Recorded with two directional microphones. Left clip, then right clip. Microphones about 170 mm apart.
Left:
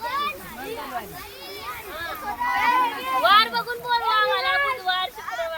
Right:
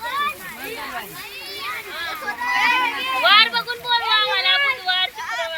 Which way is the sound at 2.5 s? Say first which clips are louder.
Right 3 dB; 40° left (ahead or behind).